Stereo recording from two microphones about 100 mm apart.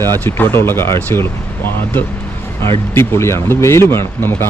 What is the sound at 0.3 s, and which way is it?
Speech, 20° left (ahead or behind).